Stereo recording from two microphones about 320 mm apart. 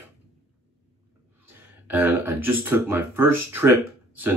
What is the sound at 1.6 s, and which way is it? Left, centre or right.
Speech, centre.